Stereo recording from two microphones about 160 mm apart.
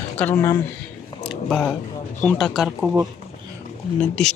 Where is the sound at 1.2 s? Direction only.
Centre (ahead or behind).